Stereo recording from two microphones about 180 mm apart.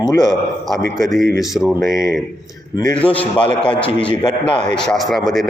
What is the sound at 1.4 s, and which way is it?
Speech, centre (ahead or behind).